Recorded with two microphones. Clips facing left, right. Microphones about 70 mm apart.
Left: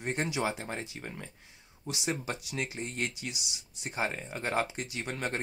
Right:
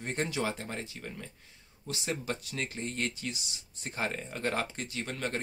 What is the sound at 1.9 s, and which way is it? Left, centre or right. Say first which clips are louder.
Speech: left 1 dB; centre.